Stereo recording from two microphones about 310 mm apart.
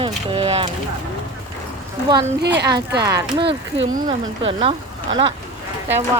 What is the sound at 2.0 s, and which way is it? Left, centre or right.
Speech, centre.